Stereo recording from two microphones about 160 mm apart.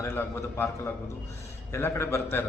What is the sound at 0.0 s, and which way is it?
Speech, 15° left (ahead or behind).